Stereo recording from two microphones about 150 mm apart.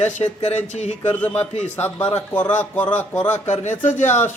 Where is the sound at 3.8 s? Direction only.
55° left (ahead or behind).